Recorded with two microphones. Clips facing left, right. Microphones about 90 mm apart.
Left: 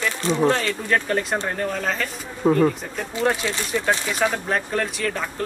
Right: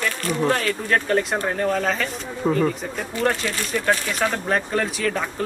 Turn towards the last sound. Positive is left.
turn(degrees=0)  # may be behind; listen again after turning